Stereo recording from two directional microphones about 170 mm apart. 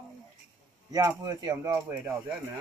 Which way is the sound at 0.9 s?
20° right (ahead or behind).